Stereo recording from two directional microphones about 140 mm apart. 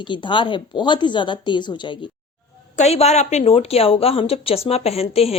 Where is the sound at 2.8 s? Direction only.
50° left (ahead or behind).